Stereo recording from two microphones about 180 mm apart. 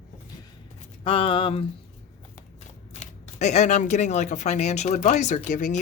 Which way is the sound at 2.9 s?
40° left (ahead or behind).